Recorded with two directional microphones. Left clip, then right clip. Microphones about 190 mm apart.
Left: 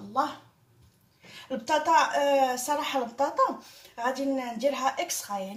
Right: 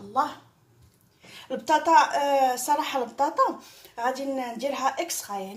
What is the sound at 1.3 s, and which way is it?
A woman's voice, 40° right (ahead or behind).